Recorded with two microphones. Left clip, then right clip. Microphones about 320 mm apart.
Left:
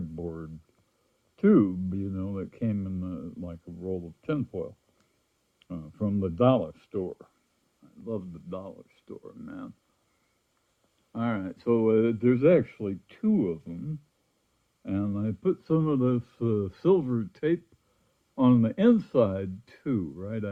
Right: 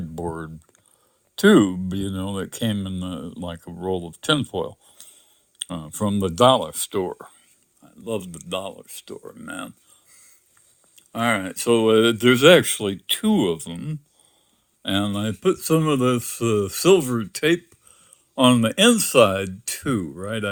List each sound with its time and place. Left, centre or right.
0.2 s typing: centre
1.6 s speech: right
11.1 s speech: centre